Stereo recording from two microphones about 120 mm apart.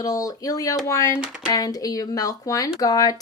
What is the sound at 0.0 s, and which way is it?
Speech, 30° left (ahead or behind).